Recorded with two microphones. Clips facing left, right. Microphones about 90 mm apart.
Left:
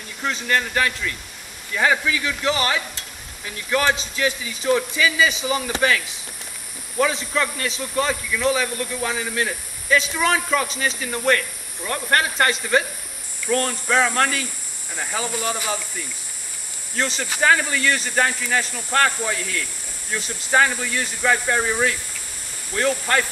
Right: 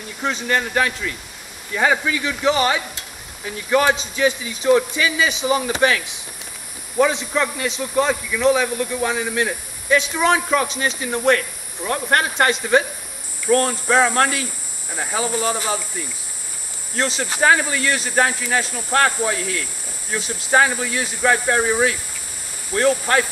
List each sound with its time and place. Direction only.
0.2 s a man's voice: 5° right (ahead or behind)